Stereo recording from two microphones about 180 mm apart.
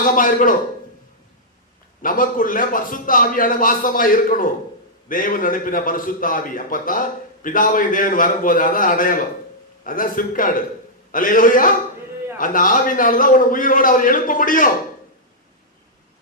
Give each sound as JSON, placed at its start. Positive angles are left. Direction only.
{"t": 0.0, "sound": "a man's voice", "side_deg": 50}
{"t": 2.0, "sound": "a man's voice", "side_deg": 50}